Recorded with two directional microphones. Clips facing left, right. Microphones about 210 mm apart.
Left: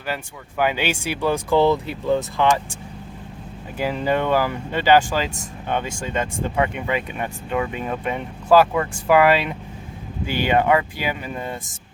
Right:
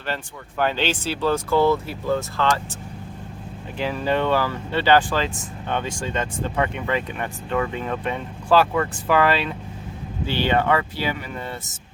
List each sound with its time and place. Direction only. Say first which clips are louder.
0.1 s speech: left 1 dB; 10° left (ahead or behind)
3.8 s speech: left 1 dB; 10° left (ahead or behind)